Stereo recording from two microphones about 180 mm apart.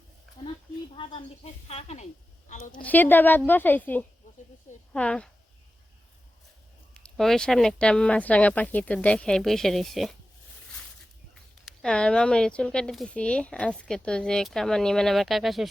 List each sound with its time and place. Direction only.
1.6 s speech: 35° left (ahead or behind)
2.7 s a woman's voice: 10° left (ahead or behind)
6.9 s speech: 5° left (ahead or behind)
11.6 s speech: 5° left (ahead or behind)